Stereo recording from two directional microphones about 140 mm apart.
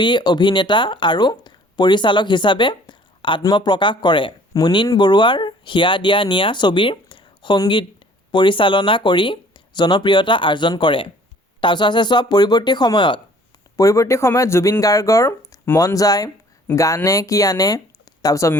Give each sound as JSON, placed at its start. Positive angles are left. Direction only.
{"t": 0.0, "sound": "speech", "side_deg": 30}